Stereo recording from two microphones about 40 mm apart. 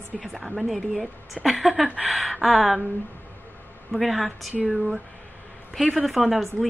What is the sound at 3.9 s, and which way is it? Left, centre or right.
Speech, centre.